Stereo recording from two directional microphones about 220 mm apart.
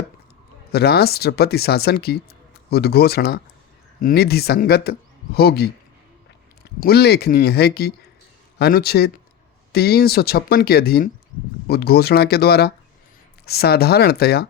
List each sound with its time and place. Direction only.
0.7 s speech: 45° left (ahead or behind)
6.7 s speech: 45° left (ahead or behind)